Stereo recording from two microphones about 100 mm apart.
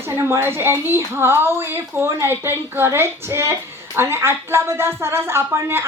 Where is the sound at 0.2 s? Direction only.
25° right (ahead or behind).